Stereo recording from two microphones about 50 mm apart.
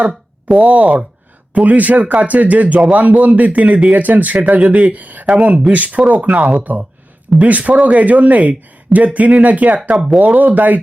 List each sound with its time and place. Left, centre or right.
0.1 s a sound: centre
0.6 s speech: right
6.2 s speech: centre
6.6 s speech: right